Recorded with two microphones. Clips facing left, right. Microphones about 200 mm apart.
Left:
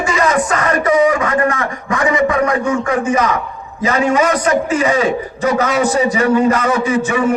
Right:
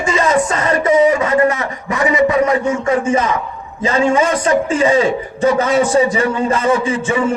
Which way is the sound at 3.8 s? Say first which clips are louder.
Even; 25° right (ahead or behind).